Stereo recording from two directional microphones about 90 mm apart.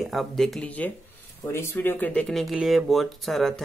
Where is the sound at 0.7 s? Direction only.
15° left (ahead or behind).